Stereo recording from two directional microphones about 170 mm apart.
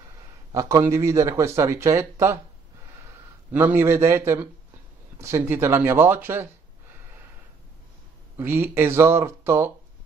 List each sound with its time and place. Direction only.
0.5 s a man's voice: 20° right (ahead or behind)
3.5 s a man's voice: 15° right (ahead or behind)
8.4 s a man's voice: 15° right (ahead or behind)